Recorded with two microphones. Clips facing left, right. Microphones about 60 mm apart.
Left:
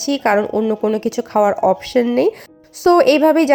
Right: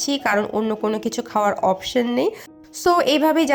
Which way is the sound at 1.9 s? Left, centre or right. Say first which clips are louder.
Left 6 dB; centre.